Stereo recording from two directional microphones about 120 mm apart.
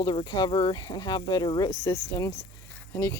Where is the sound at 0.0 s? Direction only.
40° left (ahead or behind).